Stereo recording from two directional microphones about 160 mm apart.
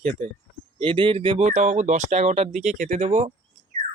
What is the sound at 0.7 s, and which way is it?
Speech, 30° right (ahead or behind).